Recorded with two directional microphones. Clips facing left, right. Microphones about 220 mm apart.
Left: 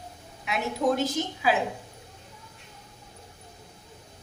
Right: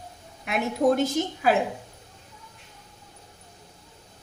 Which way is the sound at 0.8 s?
35° right (ahead or behind).